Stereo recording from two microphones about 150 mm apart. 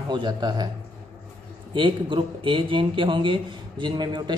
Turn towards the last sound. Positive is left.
turn(degrees=-30)  # may be behind; listen again after turning